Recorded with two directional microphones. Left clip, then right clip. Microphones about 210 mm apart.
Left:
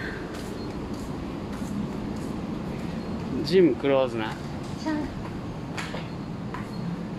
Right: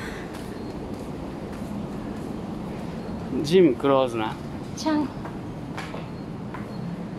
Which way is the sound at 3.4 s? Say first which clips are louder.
Right 2 dB; 20° right (ahead or behind).